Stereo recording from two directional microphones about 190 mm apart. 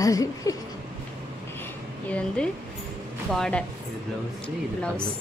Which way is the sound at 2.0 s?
5° left (ahead or behind).